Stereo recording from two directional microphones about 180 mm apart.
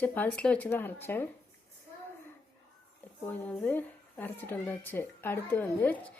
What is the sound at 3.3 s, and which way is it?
A woman's voice, 10° left (ahead or behind).